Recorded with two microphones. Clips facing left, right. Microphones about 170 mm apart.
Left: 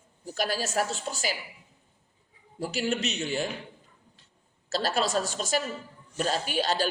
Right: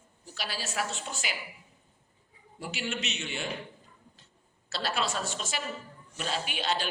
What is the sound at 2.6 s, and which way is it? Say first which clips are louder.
Speech: left 7 dB; 40° left (ahead or behind).